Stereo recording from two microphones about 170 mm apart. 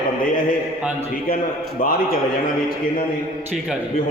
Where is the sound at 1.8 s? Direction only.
60° left (ahead or behind).